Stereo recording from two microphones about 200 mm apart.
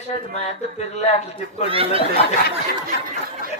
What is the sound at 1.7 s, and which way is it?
Speech, 30° right (ahead or behind).